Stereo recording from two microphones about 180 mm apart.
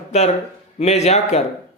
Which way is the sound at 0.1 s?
40° left (ahead or behind).